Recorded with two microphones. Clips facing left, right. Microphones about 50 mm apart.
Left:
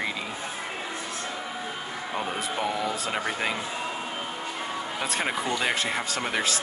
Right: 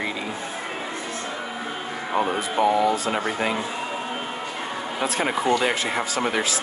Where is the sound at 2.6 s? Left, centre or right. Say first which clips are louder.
Right 11 dB; centre.